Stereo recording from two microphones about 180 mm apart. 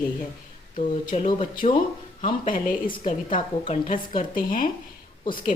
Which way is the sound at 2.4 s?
50° left (ahead or behind).